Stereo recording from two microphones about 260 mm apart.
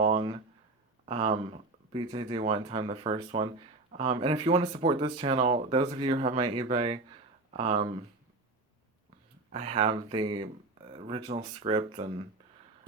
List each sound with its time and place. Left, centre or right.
0.0 s a sound: centre
1.0 s speech: right
9.5 s speech: right